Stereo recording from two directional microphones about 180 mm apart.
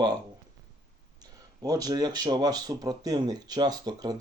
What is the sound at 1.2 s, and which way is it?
Speech, 20° right (ahead or behind).